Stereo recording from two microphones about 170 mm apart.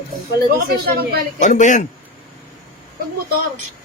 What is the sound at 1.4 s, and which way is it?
Speech, 45° left (ahead or behind).